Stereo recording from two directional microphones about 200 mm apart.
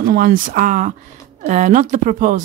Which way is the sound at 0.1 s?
45° right (ahead or behind).